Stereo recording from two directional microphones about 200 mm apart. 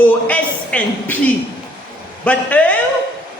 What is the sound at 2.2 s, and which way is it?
Speech, 5° left (ahead or behind).